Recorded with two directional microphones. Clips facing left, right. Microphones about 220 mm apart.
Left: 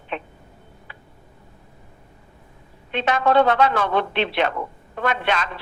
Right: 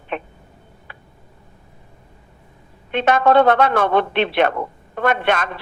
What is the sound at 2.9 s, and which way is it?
Speech, 55° right (ahead or behind).